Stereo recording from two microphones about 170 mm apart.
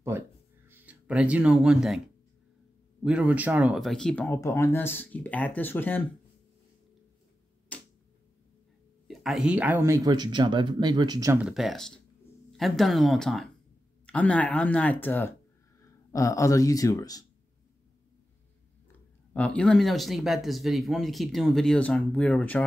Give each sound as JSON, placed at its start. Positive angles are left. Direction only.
{"t": 0.1, "sound": "speech", "side_deg": -15}
{"t": 3.0, "sound": "speech", "side_deg": -5}
{"t": 4.4, "sound": "speech", "side_deg": 15}
{"t": 7.7, "sound": "a sound", "side_deg": 10}
{"t": 9.0, "sound": "speech", "side_deg": 0}
{"t": 11.4, "sound": "speech", "side_deg": 0}
{"t": 19.3, "sound": "speech", "side_deg": 5}